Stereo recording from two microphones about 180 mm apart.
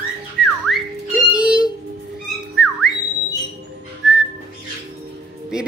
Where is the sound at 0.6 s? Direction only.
Centre (ahead or behind).